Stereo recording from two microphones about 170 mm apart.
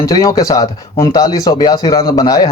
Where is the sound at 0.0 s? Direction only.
20° left (ahead or behind).